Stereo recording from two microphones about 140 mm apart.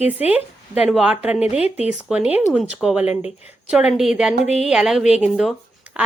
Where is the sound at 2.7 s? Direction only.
5° right (ahead or behind).